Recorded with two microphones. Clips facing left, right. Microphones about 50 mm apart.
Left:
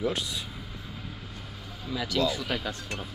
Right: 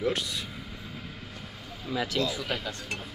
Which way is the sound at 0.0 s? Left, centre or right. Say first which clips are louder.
Right 1 dB; right.